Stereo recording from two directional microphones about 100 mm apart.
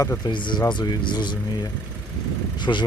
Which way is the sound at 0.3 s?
50° left (ahead or behind).